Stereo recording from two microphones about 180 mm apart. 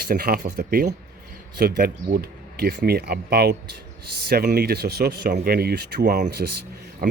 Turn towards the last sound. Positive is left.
turn(degrees=-55)  # may be behind; listen again after turning